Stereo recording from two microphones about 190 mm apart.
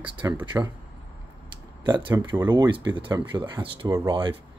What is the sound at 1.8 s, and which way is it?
Speech, 20° right (ahead or behind).